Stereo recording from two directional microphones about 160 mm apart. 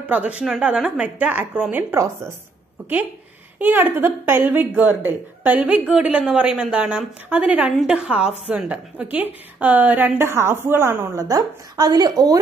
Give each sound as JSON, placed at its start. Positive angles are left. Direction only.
{"t": 0.1, "sound": "a woman's voice", "side_deg": -10}
{"t": 3.5, "sound": "a woman's voice", "side_deg": -10}